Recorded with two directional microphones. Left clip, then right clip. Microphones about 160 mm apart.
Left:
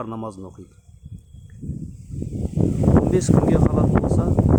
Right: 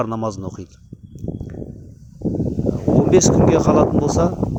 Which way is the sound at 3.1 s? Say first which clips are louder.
Right 6 dB; 30° right (ahead or behind).